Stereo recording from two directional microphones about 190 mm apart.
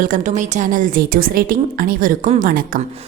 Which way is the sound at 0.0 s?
45° right (ahead or behind).